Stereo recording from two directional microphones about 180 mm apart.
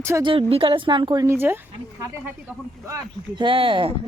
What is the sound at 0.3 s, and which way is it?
A woman's voice, 30° right (ahead or behind).